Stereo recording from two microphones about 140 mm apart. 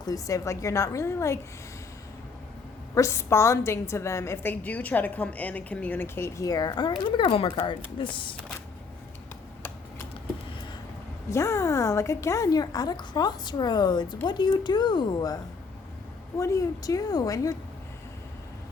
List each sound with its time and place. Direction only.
0.0 s a woman's voice: 25° left (ahead or behind)
2.9 s a woman's voice: 20° left (ahead or behind); by 8.4 s 35° left (ahead or behind)
11.3 s a woman's voice: 20° left (ahead or behind)
16.4 s a woman's voice: 20° left (ahead or behind)